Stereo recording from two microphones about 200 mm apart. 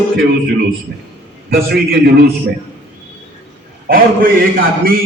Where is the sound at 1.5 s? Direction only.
50° right (ahead or behind).